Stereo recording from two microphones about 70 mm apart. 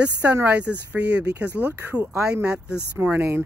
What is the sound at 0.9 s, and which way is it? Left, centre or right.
Speech, right.